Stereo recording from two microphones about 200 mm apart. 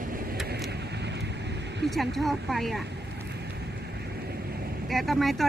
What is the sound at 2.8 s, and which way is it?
Vehicle, 55° right (ahead or behind).